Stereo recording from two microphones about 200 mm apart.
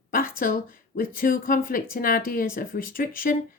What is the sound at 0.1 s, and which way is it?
Speech, 45° left (ahead or behind).